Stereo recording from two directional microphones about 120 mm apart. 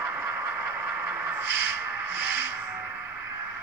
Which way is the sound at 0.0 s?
15° right (ahead or behind).